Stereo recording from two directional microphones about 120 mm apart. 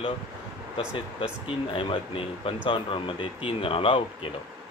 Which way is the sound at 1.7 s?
50° left (ahead or behind).